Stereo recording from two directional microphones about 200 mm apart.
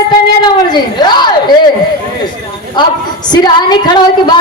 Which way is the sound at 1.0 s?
20° left (ahead or behind).